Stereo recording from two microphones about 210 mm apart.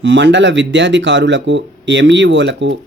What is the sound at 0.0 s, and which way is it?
Speech, 60° right (ahead or behind).